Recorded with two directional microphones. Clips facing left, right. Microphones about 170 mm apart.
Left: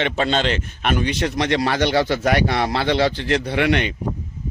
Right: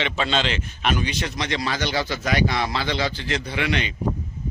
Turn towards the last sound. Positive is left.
turn(degrees=60)  # may be behind; listen again after turning